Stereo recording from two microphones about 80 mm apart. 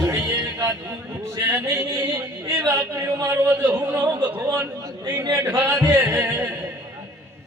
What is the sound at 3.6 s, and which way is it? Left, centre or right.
Music, right.